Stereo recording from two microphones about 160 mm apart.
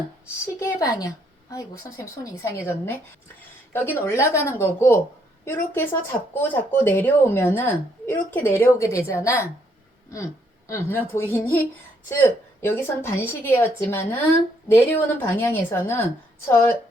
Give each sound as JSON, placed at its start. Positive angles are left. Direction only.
{"t": 0.6, "sound": "a woman's voice", "side_deg": 20}
{"t": 10.7, "sound": "a woman's voice", "side_deg": 15}